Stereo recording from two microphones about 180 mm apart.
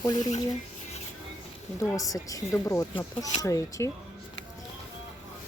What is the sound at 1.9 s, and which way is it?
A woman's voice, 20° left (ahead or behind).